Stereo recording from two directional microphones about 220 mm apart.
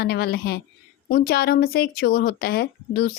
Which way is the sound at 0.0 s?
45° left (ahead or behind).